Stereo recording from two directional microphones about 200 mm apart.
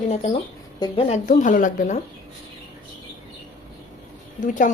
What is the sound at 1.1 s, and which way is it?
Speech, 40° left (ahead or behind).